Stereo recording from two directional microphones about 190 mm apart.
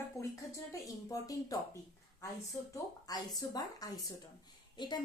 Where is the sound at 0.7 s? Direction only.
20° left (ahead or behind).